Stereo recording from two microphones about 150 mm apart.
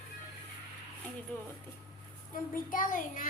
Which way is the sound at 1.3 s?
10° left (ahead or behind).